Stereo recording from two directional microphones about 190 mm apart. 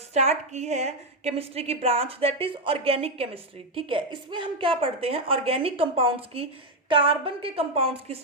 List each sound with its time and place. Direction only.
0.1 s a woman's voice: 35° right (ahead or behind)